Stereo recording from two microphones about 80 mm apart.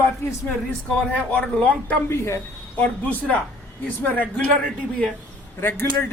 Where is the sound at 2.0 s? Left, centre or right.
Left.